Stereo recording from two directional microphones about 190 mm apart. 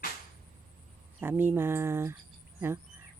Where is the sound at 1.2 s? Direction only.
10° right (ahead or behind).